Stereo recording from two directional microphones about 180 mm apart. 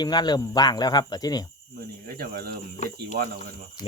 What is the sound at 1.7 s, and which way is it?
Speech, 60° right (ahead or behind).